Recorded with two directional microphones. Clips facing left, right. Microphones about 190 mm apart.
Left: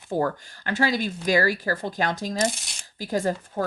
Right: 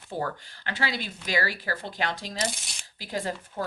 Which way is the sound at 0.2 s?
45° left (ahead or behind).